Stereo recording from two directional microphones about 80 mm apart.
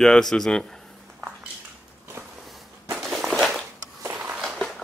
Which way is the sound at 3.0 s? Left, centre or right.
Centre.